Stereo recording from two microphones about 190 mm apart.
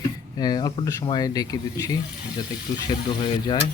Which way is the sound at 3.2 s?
25° left (ahead or behind).